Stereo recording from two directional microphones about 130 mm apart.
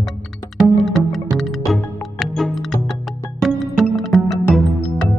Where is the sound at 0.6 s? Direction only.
Centre (ahead or behind).